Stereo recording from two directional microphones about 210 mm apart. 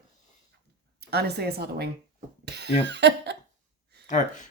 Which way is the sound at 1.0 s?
50° right (ahead or behind).